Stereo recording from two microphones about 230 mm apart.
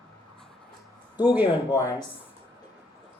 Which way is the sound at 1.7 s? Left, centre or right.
Centre.